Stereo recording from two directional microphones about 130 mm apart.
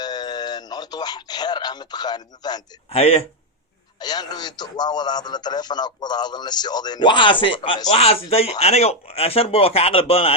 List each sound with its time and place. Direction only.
0.0 s speech: 30° left (ahead or behind)
2.9 s speech: 45° left (ahead or behind)
4.0 s speech: 30° left (ahead or behind); by 10.3 s 50° left (ahead or behind)